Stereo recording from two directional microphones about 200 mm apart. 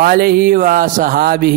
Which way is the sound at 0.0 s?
45° right (ahead or behind).